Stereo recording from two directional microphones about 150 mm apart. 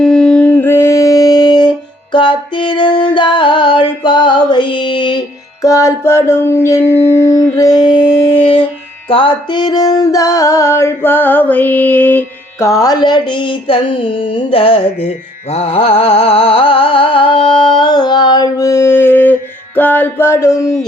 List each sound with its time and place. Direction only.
0.0 s music: 5° left (ahead or behind); by 1.7 s 30° left (ahead or behind)
2.1 s a sound: 30° left (ahead or behind)
5.6 s mantra: 20° left (ahead or behind)
7.2 s music: 20° left (ahead or behind)
7.8 s a sound: 30° left (ahead or behind)
9.0 s music: 35° left (ahead or behind); by 20.7 s 20° left (ahead or behind)